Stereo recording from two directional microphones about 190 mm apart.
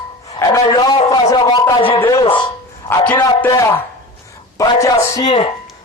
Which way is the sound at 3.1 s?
20° left (ahead or behind).